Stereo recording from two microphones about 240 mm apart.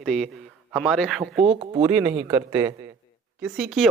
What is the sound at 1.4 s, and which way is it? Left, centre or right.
Speech, right.